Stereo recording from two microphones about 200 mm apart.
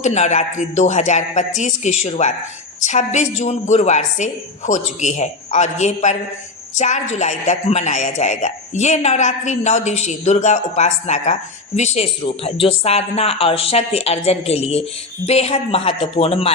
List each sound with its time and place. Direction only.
0.0 s a woman's voice: 35° left (ahead or behind)